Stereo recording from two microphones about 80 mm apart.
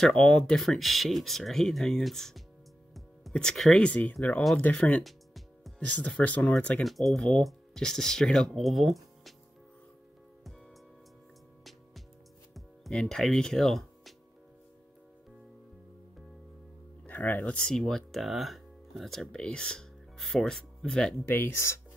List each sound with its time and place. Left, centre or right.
0.0 s speech: centre
2.9 s music: centre
3.8 s speech: centre
4.1 s speech: centre
4.6 s speech: centre
5.0 s music: centre
5.8 s speech: centre
6.8 s speech: centre
12.9 s speech: centre
17.0 s speech: left
21.3 s speech: left